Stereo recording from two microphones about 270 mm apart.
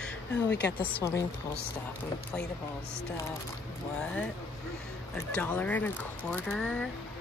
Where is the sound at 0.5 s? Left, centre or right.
Left.